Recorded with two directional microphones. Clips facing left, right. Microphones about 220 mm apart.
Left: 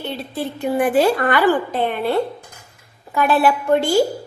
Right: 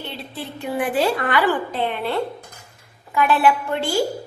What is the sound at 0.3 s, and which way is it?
A woman's voice, 45° left (ahead or behind).